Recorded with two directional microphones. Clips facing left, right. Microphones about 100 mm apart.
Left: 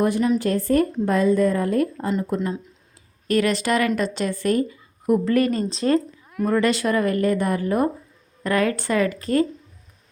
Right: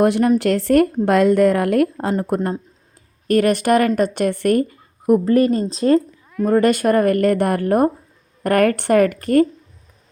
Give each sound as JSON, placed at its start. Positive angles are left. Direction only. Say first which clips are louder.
{"t": 0.0, "sound": "speech", "louder": "right 5 dB", "side_deg": -65}
{"t": 5.2, "sound": "speech", "louder": "right 4 dB", "side_deg": -35}
{"t": 6.5, "sound": "speech", "louder": "right 5 dB", "side_deg": -50}